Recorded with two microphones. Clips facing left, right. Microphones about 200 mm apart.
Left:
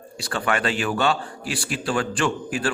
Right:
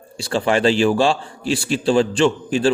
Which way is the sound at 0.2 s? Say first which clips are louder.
Right 7 dB; 25° right (ahead or behind).